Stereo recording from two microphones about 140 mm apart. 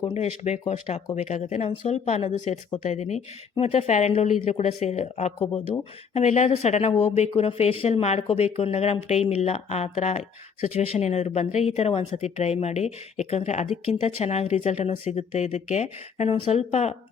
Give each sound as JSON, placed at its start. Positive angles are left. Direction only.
{"t": 0.1, "sound": "speech", "side_deg": 50}